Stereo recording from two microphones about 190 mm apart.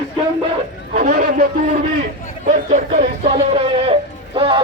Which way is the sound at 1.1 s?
50° right (ahead or behind).